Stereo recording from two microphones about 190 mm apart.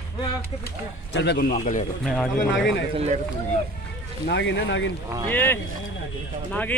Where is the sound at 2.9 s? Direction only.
35° right (ahead or behind).